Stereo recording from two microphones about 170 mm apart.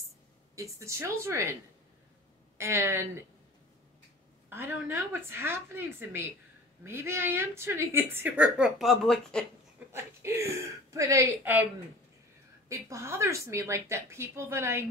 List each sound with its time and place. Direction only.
0.6 s a woman's voice: 15° right (ahead or behind)
2.5 s a woman's voice: 15° right (ahead or behind)
4.5 s a woman's voice: 15° right (ahead or behind); by 9.5 s 5° left (ahead or behind)
9.9 s a woman's voice: 15° right (ahead or behind)
12.6 s a woman's voice: 15° right (ahead or behind)